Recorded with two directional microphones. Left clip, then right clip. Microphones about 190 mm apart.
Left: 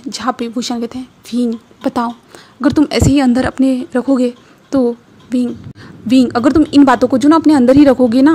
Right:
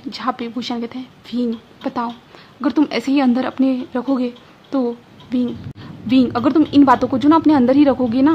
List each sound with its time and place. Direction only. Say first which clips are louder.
0.1 s a woman's voice: left 4 dB; 25° left (ahead or behind)